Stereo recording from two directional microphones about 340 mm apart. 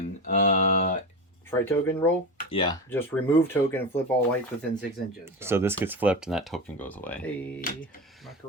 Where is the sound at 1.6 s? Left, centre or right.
Centre.